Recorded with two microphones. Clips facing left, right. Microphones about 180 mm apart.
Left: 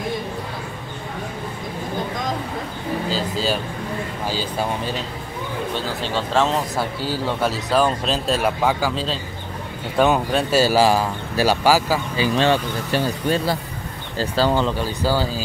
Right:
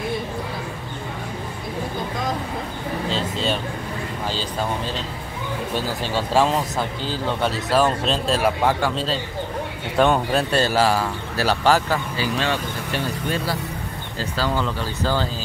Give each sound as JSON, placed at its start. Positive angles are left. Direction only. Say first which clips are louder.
{"t": 3.1, "sound": "speech", "louder": "left 1 dB", "side_deg": 5}
{"t": 5.8, "sound": "speech", "louder": "right 2 dB", "side_deg": -10}
{"t": 6.8, "sound": "speech", "louder": "left 2 dB", "side_deg": 5}
{"t": 12.4, "sound": "speech", "louder": "left 5 dB", "side_deg": 30}
{"t": 14.3, "sound": "speech", "louder": "left 5 dB", "side_deg": 25}
{"t": 14.8, "sound": "speech", "louder": "left 2 dB", "side_deg": 10}